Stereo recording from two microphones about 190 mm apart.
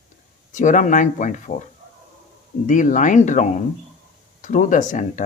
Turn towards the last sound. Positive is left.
turn(degrees=45)  # may be behind; listen again after turning